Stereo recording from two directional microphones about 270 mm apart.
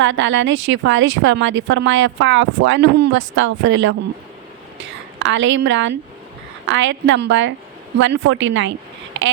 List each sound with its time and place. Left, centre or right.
0.0 s a woman's voice: right
5.2 s a woman's voice: right